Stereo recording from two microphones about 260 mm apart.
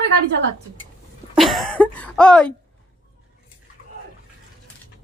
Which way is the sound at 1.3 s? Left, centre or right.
Centre.